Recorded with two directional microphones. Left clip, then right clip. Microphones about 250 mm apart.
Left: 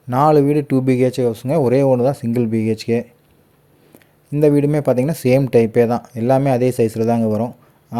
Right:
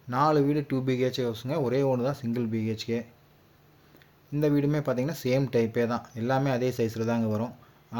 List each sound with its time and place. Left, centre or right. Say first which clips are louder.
0.1 s speech: left 11 dB; left
4.4 s speech: left 12 dB; left